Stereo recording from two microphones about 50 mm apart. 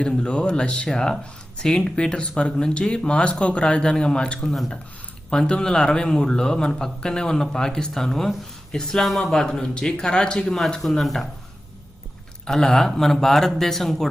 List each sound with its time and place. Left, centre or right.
0.2 s a man's voice: centre
9.4 s a man's voice: centre
10.8 s speech: centre
12.5 s a man's voice: centre